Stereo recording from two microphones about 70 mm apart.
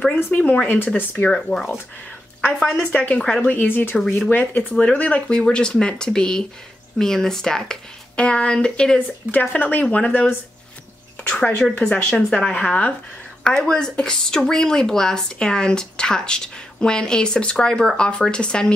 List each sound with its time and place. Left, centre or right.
0.3 s speech: centre
1.3 s speech: centre
3.1 s speech: centre
3.5 s speech: left
13.4 s speech: centre